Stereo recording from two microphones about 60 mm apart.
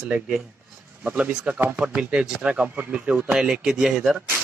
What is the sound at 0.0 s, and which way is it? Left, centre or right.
A man's voice, centre.